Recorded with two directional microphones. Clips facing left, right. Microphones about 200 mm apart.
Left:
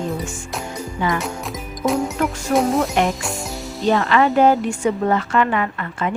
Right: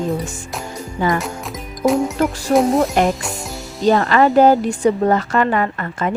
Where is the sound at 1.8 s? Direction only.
Centre (ahead or behind).